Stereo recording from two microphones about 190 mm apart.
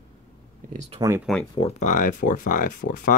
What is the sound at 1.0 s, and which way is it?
Speech, 15° right (ahead or behind).